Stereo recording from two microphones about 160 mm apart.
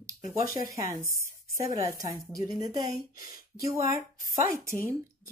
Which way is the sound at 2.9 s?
70° left (ahead or behind).